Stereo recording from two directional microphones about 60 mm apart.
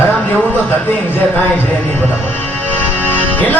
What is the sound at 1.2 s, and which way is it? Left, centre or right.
Music, left.